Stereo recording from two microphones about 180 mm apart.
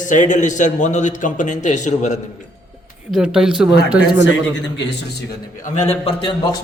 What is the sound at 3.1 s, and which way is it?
Speech, 5° right (ahead or behind).